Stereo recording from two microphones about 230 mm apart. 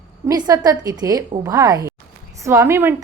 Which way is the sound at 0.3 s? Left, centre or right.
Centre.